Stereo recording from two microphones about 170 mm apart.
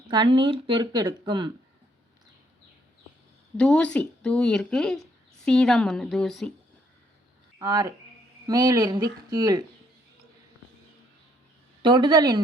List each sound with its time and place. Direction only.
0.1 s speech: 25° right (ahead or behind)
3.6 s speech: 5° left (ahead or behind)
7.6 s speech: 20° right (ahead or behind)
11.8 s speech: 25° right (ahead or behind)